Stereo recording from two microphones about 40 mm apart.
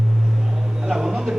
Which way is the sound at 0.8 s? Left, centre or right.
Centre.